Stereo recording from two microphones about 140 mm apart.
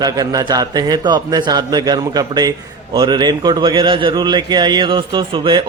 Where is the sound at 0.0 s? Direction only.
25° right (ahead or behind).